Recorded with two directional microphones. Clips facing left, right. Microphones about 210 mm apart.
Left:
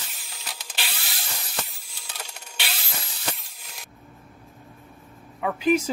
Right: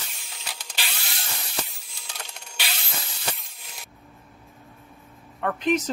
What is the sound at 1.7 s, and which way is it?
Sawing, centre (ahead or behind).